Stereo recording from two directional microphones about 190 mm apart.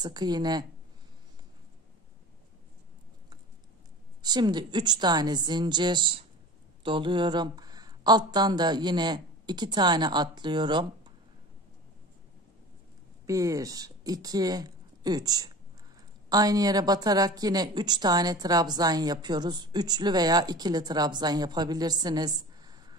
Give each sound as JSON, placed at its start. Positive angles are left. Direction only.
{"t": 0.0, "sound": "speech", "side_deg": -20}
{"t": 4.2, "sound": "speech", "side_deg": -20}
{"t": 13.3, "sound": "speech", "side_deg": -15}